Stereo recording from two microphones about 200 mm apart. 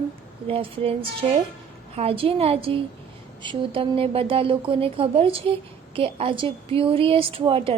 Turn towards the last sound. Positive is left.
turn(degrees=-30)  # may be behind; listen again after turning